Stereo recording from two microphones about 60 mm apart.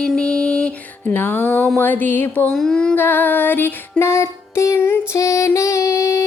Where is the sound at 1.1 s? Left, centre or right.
Left.